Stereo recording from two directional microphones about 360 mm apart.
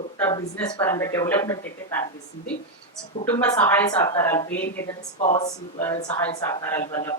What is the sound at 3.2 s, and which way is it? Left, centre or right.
A woman's voice, centre.